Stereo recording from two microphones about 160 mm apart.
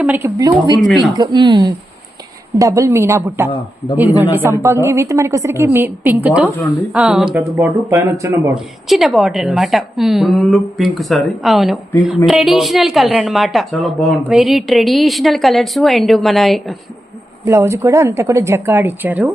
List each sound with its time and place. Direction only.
0.2 s a woman's voice: 20° right (ahead or behind)
8.5 s a woman's voice: centre (ahead or behind)
17.4 s a woman's voice: 20° right (ahead or behind)